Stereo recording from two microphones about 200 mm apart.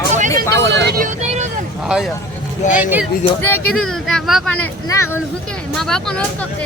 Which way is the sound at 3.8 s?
Centre (ahead or behind).